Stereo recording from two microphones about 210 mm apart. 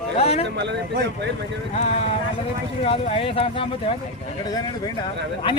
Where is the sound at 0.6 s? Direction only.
55° right (ahead or behind).